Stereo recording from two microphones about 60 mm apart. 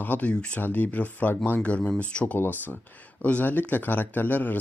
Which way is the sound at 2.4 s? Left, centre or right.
Left.